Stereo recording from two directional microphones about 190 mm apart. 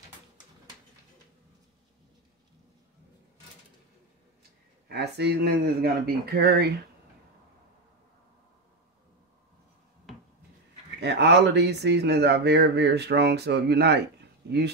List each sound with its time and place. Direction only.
4.4 s speech: 60° right (ahead or behind)
11.0 s speech: 65° right (ahead or behind)